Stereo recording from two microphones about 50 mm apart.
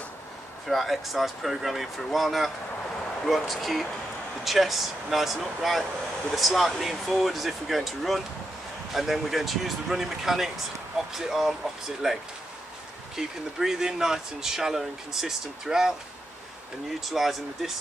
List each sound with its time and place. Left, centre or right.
0.7 s speech: centre
17.0 s speech: centre